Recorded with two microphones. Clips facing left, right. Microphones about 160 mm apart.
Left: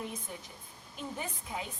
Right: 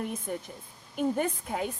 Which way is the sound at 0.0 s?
60° right (ahead or behind).